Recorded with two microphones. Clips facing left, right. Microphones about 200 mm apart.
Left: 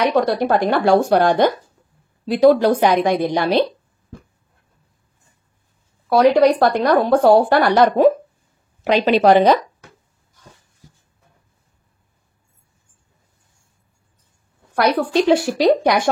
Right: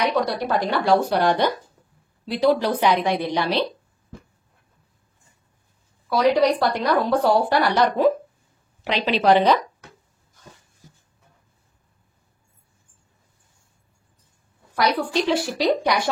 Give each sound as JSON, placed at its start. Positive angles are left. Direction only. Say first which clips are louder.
{"t": 0.1, "sound": "speech", "louder": "left 6 dB", "side_deg": 50}
{"t": 6.0, "sound": "speech", "louder": "left 5 dB", "side_deg": 50}
{"t": 15.0, "sound": "speech", "louder": "left 6 dB", "side_deg": 50}